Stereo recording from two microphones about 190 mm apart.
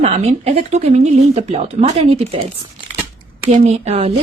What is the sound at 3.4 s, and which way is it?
Speech, 35° right (ahead or behind).